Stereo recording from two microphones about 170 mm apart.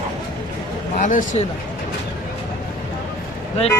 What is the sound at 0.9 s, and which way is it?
Speech, 50° left (ahead or behind).